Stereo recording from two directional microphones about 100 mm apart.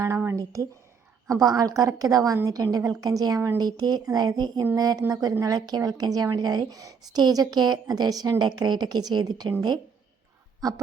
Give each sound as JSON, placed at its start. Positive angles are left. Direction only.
{"t": 0.3, "sound": "a woman's voice", "side_deg": -35}